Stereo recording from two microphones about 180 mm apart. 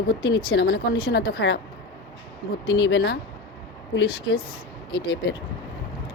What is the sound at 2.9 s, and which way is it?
Speech, 70° left (ahead or behind).